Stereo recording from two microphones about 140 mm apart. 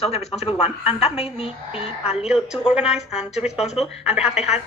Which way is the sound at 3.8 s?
45° left (ahead or behind).